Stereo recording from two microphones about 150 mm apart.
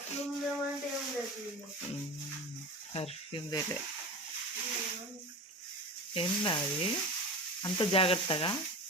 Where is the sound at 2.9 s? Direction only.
40° left (ahead or behind).